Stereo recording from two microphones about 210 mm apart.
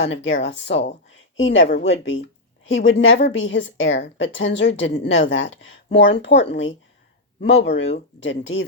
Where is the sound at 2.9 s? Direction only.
65° left (ahead or behind).